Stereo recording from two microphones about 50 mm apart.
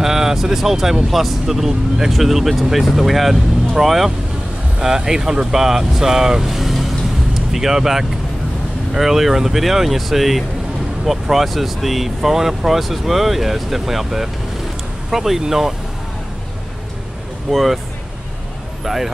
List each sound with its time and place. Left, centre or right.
0.0 s speech: centre
6.4 s vehicle: centre
7.5 s speech: centre
17.5 s speech: centre